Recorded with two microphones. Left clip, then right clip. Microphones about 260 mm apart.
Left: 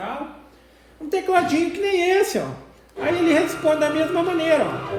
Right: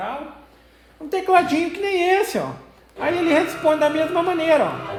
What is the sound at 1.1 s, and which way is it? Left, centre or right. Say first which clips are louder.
A woman's voice: right 2 dB; right.